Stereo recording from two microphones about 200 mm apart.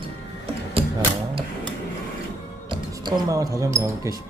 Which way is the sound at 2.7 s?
20° right (ahead or behind).